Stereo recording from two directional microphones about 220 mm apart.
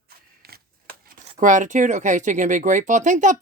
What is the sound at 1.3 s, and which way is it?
Speech, 35° right (ahead or behind).